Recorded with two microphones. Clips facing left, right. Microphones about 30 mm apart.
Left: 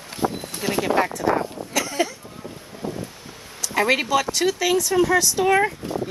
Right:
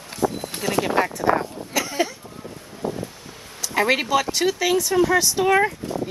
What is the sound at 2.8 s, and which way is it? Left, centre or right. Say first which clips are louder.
Wind: right 3 dB; centre.